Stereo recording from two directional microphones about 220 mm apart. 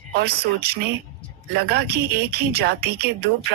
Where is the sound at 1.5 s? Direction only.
45° right (ahead or behind).